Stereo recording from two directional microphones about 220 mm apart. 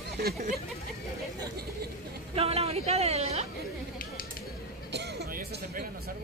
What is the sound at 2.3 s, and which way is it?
A woman's voice, 25° right (ahead or behind).